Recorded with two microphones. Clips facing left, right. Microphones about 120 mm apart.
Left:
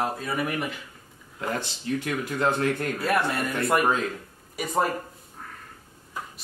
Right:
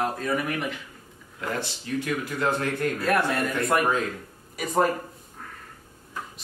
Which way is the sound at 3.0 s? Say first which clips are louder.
Right 1 dB; centre (ahead or behind).